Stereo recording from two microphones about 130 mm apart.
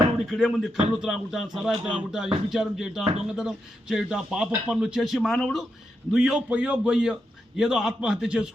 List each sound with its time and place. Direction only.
0.3 s speech: centre (ahead or behind)